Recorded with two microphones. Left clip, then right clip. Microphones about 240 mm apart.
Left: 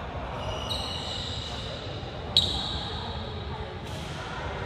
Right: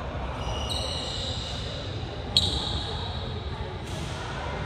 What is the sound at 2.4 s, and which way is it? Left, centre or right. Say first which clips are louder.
Basketball bounce: even; left.